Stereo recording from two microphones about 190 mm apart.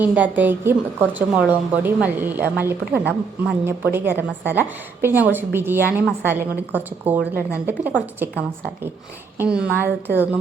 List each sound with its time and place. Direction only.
0.0 s a woman's voice: 10° right (ahead or behind)